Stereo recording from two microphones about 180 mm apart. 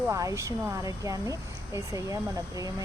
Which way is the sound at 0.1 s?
15° right (ahead or behind).